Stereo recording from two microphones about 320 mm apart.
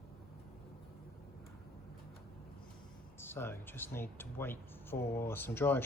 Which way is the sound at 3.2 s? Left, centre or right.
Centre.